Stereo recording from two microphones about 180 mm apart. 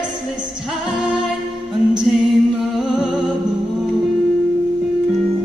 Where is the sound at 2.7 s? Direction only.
Centre (ahead or behind).